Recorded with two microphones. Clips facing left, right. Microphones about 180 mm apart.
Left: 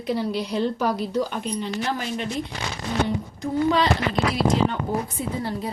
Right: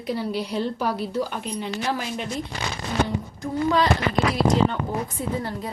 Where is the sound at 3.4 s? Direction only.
25° left (ahead or behind).